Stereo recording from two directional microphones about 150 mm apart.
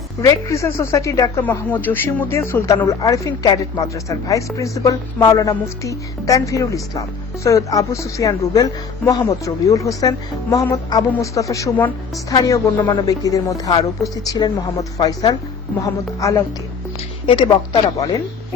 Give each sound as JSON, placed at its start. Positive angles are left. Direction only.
{"t": 0.2, "sound": "speech", "side_deg": 20}
{"t": 17.2, "sound": "speech", "side_deg": 35}